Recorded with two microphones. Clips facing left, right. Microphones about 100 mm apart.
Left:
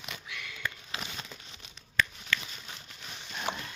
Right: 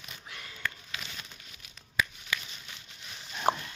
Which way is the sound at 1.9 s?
5° right (ahead or behind).